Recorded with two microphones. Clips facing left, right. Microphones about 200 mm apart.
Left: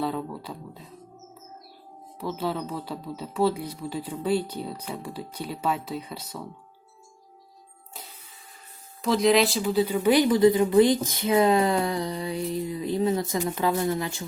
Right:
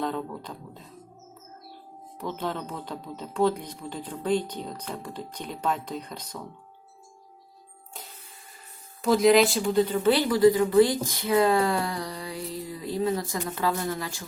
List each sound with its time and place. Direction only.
0.0 s speech: 5° left (ahead or behind)
2.1 s speech: 5° left (ahead or behind)
9.0 s speech: centre (ahead or behind); by 14.3 s 25° left (ahead or behind)